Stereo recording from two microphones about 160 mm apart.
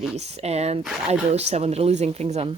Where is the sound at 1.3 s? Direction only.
40° right (ahead or behind).